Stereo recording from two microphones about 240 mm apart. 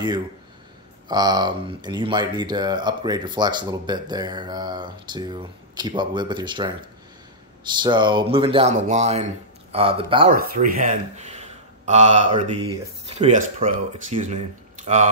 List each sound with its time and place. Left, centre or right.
1.0 s speech: centre
7.7 s speech: centre
10.3 s speech: right